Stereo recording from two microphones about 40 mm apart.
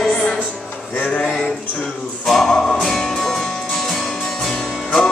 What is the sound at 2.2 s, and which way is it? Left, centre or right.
Music, centre.